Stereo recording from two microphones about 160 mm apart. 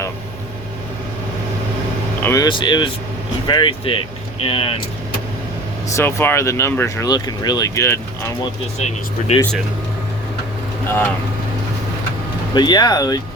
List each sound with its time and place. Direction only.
2.2 s speech: 20° left (ahead or behind)
6.0 s speech: 15° left (ahead or behind)
8.8 s speech: 45° left (ahead or behind)
12.5 s speech: 25° left (ahead or behind)